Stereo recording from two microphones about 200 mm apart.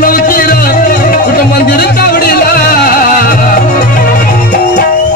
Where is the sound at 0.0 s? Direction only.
45° left (ahead or behind).